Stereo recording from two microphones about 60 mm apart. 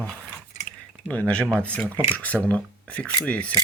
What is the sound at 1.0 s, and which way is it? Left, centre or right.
Speech, left.